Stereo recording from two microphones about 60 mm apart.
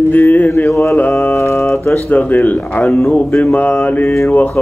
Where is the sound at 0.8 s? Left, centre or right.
Left.